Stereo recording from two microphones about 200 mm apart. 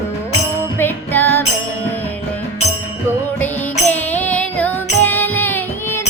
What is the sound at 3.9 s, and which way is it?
Child singing, 10° left (ahead or behind).